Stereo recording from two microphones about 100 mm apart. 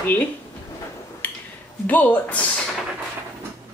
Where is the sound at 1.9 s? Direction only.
15° left (ahead or behind).